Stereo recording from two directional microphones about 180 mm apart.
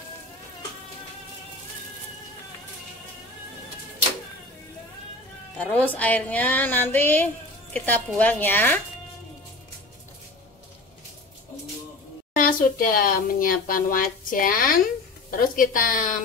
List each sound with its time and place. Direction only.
5.6 s speech: 10° left (ahead or behind)
12.4 s a woman's voice: 50° left (ahead or behind)